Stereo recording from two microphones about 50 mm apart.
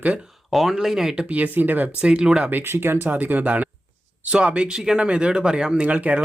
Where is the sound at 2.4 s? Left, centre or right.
Right.